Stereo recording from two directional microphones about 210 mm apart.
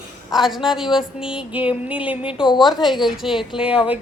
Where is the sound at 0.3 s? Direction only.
Centre (ahead or behind).